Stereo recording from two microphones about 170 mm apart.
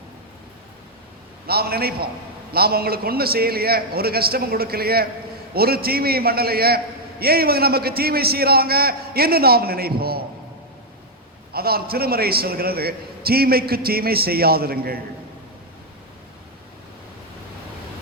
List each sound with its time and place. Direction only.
1.5 s a man's voice: 65° right (ahead or behind)
11.5 s a man's voice: 65° right (ahead or behind)